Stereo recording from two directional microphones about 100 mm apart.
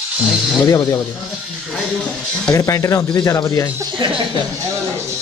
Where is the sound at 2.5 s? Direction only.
35° left (ahead or behind).